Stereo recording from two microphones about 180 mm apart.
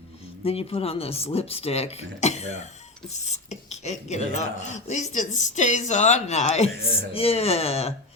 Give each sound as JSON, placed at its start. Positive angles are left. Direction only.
{"t": 0.4, "sound": "speech", "side_deg": 35}